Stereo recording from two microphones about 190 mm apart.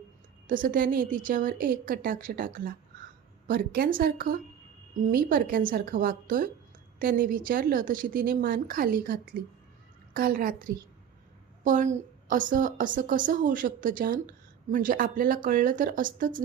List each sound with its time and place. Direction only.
0.4 s a woman's voice: 45° right (ahead or behind)